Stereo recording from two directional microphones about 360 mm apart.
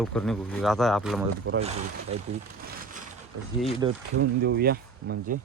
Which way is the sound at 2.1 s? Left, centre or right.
Centre.